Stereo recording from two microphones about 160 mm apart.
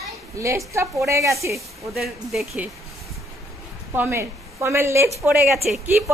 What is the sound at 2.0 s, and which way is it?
Speech, 5° right (ahead or behind).